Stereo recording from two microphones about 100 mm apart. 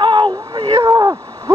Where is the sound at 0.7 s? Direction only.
35° right (ahead or behind).